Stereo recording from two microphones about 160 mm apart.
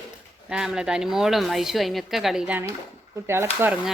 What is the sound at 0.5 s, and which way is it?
A woman's voice, 5° right (ahead or behind).